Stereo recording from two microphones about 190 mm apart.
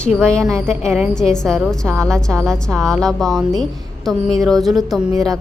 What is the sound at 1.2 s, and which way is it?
A woman's voice, 5° left (ahead or behind).